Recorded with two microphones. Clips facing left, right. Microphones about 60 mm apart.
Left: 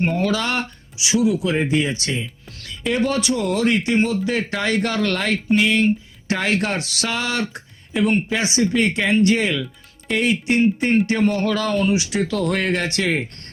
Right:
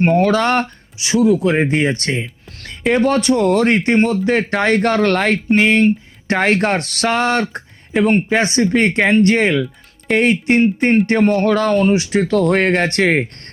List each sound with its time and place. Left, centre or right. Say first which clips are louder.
0.0 s speech: right 7 dB; right